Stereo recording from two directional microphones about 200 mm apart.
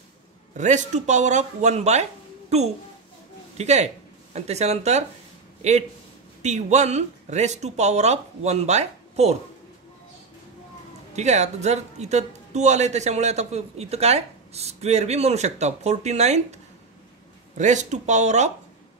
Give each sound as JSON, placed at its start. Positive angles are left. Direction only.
{"t": 0.6, "sound": "a man's voice", "side_deg": -35}
{"t": 11.1, "sound": "a man's voice", "side_deg": -35}
{"t": 17.6, "sound": "a man's voice", "side_deg": -35}